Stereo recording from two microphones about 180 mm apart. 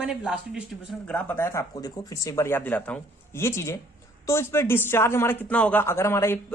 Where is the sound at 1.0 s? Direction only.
10° left (ahead or behind).